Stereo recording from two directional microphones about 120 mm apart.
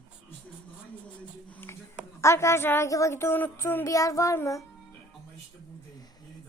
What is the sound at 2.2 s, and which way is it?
A woman's voice, 20° left (ahead or behind).